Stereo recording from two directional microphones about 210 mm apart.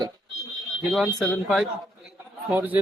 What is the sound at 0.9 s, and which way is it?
Speech, centre (ahead or behind).